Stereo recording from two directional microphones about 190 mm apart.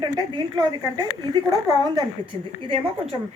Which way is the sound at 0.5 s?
20° right (ahead or behind).